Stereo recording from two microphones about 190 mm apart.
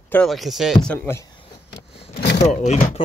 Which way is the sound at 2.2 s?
60° left (ahead or behind).